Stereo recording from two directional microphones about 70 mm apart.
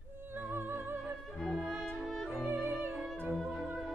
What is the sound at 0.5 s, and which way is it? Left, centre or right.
Music, right.